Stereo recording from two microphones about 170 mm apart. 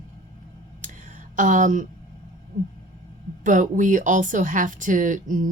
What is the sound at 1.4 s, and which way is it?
Speech, 50° right (ahead or behind).